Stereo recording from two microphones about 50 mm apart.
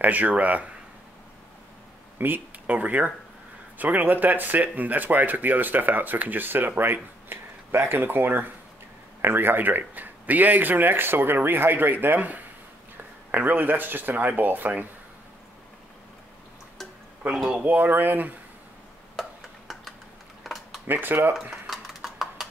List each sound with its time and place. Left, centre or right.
0.0 s speech: right
2.1 s speech: right
17.2 s speech: right
20.4 s a sound: centre
20.8 s speech: right
21.6 s a sound: centre